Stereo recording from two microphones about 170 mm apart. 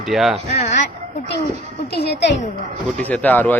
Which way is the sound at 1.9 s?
70° left (ahead or behind).